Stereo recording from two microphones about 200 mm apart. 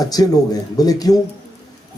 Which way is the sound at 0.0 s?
20° left (ahead or behind).